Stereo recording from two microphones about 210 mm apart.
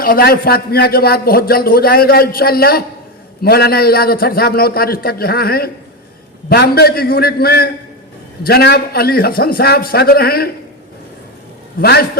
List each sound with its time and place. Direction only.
0.0 s a man's voice: 45° left (ahead or behind)
11.8 s a man's voice: 50° left (ahead or behind)